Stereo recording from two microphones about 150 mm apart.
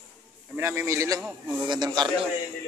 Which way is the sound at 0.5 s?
15° right (ahead or behind).